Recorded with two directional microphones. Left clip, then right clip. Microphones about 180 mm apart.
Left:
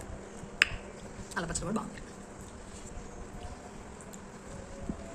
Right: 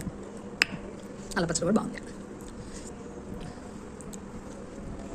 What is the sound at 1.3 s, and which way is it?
Speech, 20° right (ahead or behind).